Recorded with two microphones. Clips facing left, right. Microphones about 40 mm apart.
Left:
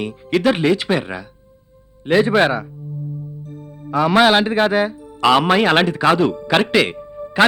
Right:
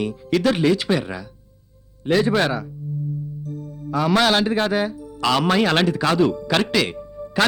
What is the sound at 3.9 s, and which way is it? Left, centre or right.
Speech, left.